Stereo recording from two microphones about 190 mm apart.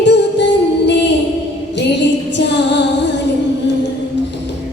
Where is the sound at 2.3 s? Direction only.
65° left (ahead or behind).